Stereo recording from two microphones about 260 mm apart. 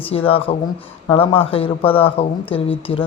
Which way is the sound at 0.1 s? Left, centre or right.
Left.